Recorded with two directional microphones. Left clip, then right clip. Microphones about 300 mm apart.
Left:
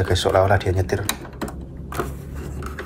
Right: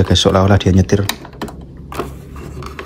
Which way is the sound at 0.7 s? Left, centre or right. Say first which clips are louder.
Right 7 dB; left.